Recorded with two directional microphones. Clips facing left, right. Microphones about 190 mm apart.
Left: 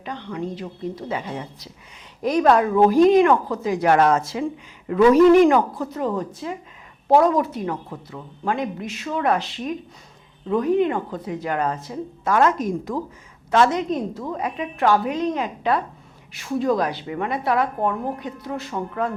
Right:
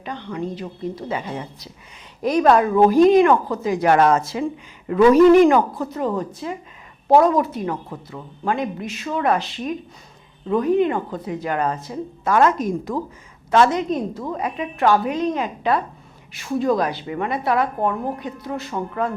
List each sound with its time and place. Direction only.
0.0 s a woman's voice: 15° right (ahead or behind)
5.1 s a woman's voice: 10° right (ahead or behind)
5.6 s a woman's voice: 25° right (ahead or behind)
8.4 s a woman's voice: 10° right (ahead or behind)
14.2 s speech: 25° right (ahead or behind)
14.4 s a woman's voice: 10° right (ahead or behind)